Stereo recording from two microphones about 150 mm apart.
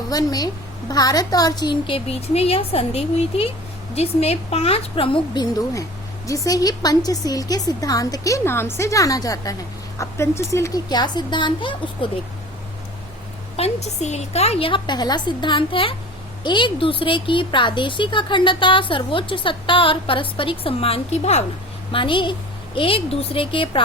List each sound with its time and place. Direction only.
0.1 s a woman's voice: 25° left (ahead or behind)
13.6 s a woman's voice: 45° left (ahead or behind)
21.9 s a woman's voice: 35° left (ahead or behind)